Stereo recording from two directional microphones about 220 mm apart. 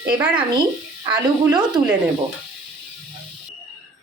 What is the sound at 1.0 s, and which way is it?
Speech, 15° right (ahead or behind).